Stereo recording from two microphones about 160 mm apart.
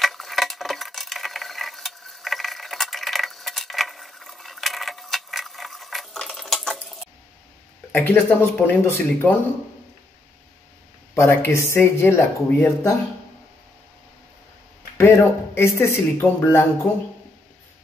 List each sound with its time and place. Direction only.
0.0 s a sound: centre (ahead or behind)
7.9 s speech: 15° left (ahead or behind)
11.1 s speech: 15° left (ahead or behind)
15.0 s speech: 15° left (ahead or behind)